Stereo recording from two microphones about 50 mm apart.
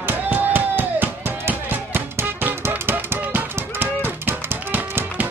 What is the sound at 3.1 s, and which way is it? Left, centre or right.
Music, right.